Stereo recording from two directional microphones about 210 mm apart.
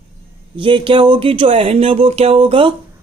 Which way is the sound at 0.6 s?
25° right (ahead or behind).